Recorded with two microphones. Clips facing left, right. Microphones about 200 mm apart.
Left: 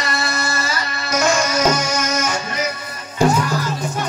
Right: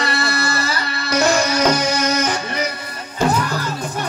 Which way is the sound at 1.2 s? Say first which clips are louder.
Right 1 dB; 35° right (ahead or behind).